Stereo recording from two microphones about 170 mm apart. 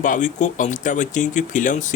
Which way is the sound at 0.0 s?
50° left (ahead or behind).